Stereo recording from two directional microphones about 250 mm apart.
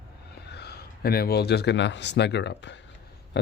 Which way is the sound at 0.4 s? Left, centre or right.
Left.